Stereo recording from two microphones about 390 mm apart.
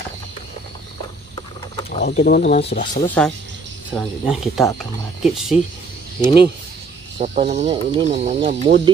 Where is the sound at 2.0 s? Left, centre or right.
Centre.